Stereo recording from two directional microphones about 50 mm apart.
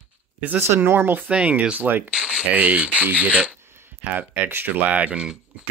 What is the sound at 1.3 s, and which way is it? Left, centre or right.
Speech, right.